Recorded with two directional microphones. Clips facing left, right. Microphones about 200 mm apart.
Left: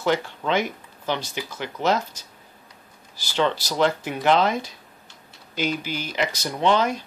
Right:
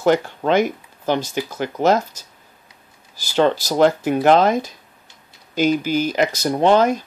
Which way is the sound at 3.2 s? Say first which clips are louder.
Right 6 dB; 45° right (ahead or behind).